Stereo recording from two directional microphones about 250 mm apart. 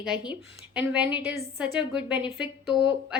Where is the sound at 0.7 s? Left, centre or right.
Centre.